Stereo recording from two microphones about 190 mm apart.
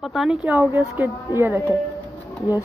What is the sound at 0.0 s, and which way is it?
Speech, centre (ahead or behind).